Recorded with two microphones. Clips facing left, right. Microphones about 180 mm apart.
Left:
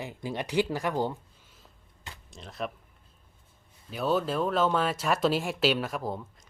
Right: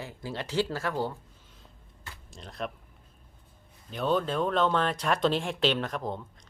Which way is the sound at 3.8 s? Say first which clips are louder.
Even; 5° left (ahead or behind).